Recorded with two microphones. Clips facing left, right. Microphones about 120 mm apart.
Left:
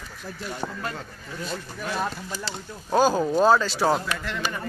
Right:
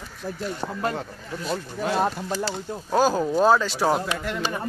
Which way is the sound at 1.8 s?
30° right (ahead or behind).